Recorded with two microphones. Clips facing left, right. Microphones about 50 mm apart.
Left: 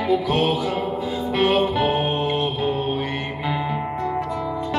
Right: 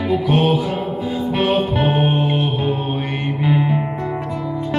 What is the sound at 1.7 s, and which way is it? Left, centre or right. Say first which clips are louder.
Music: right 3 dB; centre.